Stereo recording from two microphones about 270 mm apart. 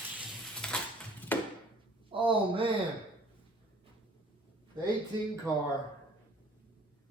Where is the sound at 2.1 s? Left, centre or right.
Centre.